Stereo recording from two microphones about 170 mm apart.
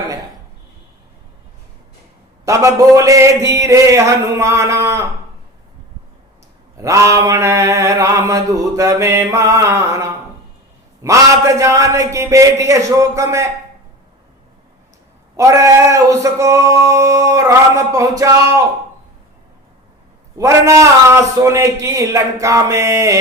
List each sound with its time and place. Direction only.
2.4 s a man's voice: 20° right (ahead or behind)
6.7 s mantra: 20° right (ahead or behind)
11.0 s a man's voice: 20° right (ahead or behind)
15.4 s mantra: 20° right (ahead or behind)
20.4 s a man's voice: 15° right (ahead or behind)